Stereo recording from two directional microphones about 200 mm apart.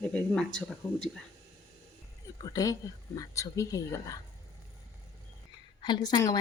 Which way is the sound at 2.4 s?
20° left (ahead or behind).